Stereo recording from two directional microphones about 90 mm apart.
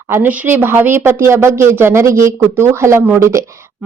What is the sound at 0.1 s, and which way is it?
Speech, 20° right (ahead or behind).